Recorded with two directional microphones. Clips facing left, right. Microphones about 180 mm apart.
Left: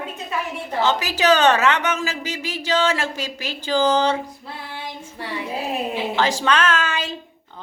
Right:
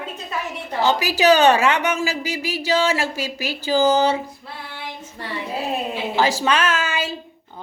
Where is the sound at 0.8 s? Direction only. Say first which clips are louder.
Right 2 dB; 10° right (ahead or behind).